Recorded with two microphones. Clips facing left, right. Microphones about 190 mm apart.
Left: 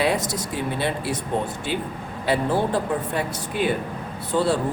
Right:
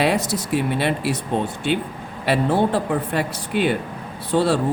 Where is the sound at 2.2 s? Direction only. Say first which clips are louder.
Right 3 dB; 70° right (ahead or behind).